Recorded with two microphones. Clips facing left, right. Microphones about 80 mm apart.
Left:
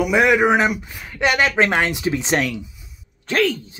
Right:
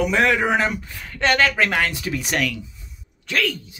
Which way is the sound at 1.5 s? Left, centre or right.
Left.